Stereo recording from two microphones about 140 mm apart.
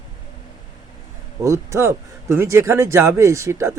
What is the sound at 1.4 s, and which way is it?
Speech, 20° right (ahead or behind).